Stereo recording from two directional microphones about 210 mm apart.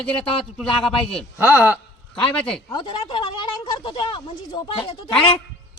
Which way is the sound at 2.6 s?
20° left (ahead or behind).